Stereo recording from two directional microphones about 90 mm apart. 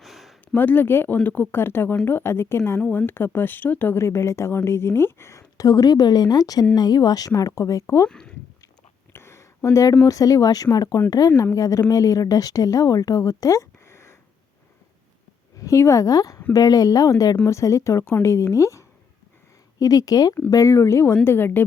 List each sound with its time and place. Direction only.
0.0 s a sound: centre (ahead or behind)
0.5 s a woman's voice: 20° left (ahead or behind); by 8.0 s 35° left (ahead or behind)
8.0 s speech: 10° left (ahead or behind)
9.1 s a sound: 30° left (ahead or behind)
10.0 s a woman's voice: 40° left (ahead or behind)
15.5 s a woman's voice: 35° left (ahead or behind)